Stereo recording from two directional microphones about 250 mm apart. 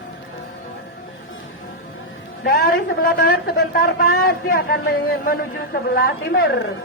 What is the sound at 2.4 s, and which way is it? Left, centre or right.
A woman's voice, left.